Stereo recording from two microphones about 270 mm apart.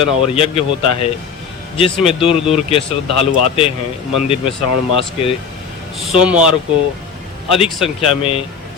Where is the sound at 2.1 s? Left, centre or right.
Left.